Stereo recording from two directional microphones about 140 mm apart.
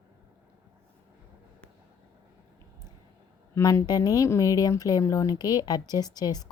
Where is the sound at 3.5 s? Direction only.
25° left (ahead or behind).